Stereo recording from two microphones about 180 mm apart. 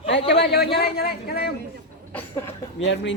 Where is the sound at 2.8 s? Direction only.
80° left.